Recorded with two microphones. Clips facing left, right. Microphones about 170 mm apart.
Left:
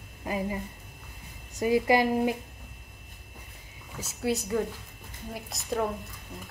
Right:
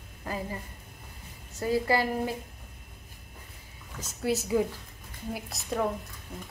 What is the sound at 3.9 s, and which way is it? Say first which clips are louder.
Speech: even; 5° left (ahead or behind).